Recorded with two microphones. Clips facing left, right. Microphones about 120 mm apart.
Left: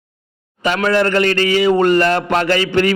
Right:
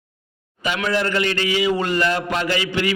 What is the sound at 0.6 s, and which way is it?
A man's voice, 55° left (ahead or behind).